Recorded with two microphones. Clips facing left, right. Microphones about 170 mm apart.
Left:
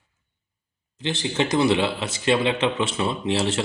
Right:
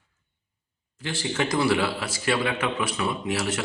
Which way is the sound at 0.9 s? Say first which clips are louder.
Left 3 dB; 20° left (ahead or behind).